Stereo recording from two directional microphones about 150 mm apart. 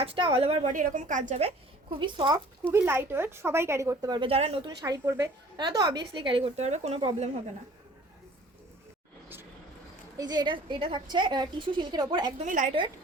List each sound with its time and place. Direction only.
0.0 s a woman's voice: 35° right (ahead or behind)
2.0 s speech: 30° right (ahead or behind)
2.6 s speech: 15° right (ahead or behind)
4.3 s a woman's voice: 45° right (ahead or behind)
4.8 s a woman's voice: 20° right (ahead or behind); by 7.3 s 45° right (ahead or behind)
10.2 s a woman's voice: 30° right (ahead or behind)
12.5 s a woman's voice: 60° right (ahead or behind)